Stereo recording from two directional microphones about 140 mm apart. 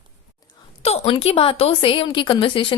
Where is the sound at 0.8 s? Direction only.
45° left (ahead or behind).